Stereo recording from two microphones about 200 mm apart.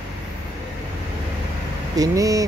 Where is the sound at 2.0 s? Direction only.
15° right (ahead or behind).